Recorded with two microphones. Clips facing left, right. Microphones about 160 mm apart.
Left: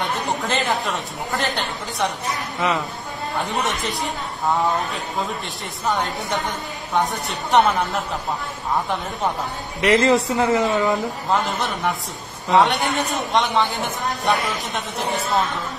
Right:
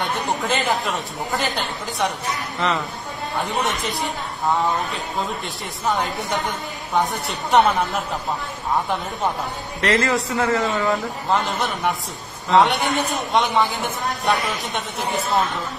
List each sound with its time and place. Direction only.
0.0 s speech: centre (ahead or behind)
2.6 s speech: 10° left (ahead or behind)
3.3 s speech: centre (ahead or behind)
9.8 s a man's voice: 20° left (ahead or behind)
11.2 s speech: centre (ahead or behind)